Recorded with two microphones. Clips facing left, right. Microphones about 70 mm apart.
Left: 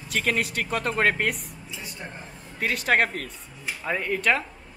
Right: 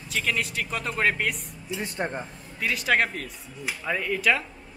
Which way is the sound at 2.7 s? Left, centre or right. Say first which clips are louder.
Left 1 dB; centre.